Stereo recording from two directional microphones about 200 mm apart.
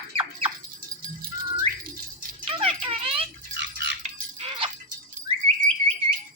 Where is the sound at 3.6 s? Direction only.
60° right (ahead or behind).